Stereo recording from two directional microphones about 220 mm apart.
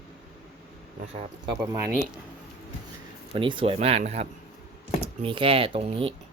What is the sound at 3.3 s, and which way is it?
Speech, 20° right (ahead or behind).